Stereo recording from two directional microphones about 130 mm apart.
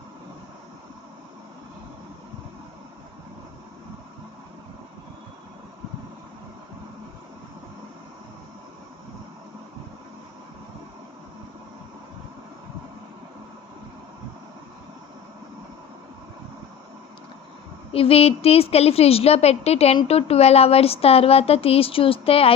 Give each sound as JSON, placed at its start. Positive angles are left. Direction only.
{"t": 17.9, "sound": "speech", "side_deg": 50}